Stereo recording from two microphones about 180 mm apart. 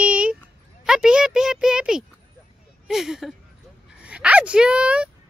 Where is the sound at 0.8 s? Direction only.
5° right (ahead or behind).